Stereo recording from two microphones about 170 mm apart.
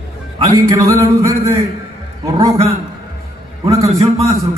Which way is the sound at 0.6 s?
20° right (ahead or behind).